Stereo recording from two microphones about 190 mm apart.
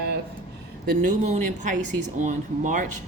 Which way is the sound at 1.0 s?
40° right (ahead or behind).